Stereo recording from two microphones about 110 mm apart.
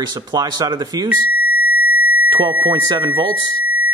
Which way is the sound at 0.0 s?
40° right (ahead or behind).